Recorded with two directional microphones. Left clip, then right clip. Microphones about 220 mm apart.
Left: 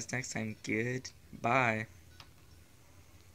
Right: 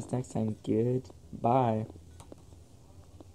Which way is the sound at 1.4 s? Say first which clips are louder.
Right 3 dB; 35° left (ahead or behind).